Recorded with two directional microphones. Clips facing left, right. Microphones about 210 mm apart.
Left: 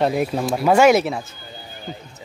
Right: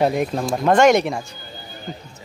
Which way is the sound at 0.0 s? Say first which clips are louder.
Even; 5° left (ahead or behind).